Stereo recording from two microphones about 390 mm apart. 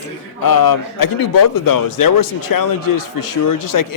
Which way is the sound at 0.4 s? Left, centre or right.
Left.